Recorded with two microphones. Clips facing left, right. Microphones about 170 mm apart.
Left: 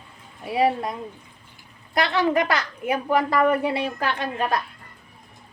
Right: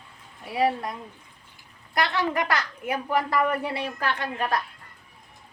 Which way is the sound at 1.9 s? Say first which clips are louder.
Left 4 dB; 25° left (ahead or behind).